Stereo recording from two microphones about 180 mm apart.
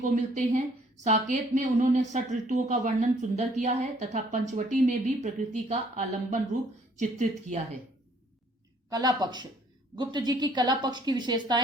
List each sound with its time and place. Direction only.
0.0 s a woman's voice: 45° right (ahead or behind)
8.9 s a woman's voice: 20° right (ahead or behind)